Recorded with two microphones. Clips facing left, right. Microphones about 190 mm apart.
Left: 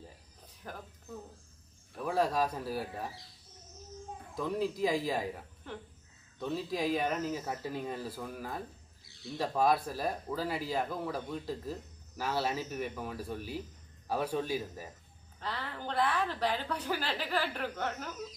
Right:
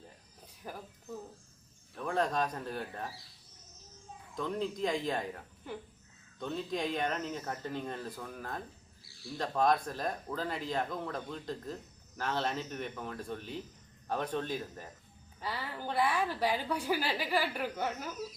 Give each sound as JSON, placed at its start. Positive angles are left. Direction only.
{"t": 0.6, "sound": "speech", "side_deg": -10}
{"t": 2.0, "sound": "speech", "side_deg": 5}
{"t": 4.4, "sound": "speech", "side_deg": 5}
{"t": 5.7, "sound": "a woman's voice", "side_deg": -10}
{"t": 6.4, "sound": "speech", "side_deg": 5}
{"t": 9.0, "sound": "a sound", "side_deg": 20}
{"t": 9.4, "sound": "speech", "side_deg": 5}
{"t": 15.4, "sound": "a woman's voice", "side_deg": -10}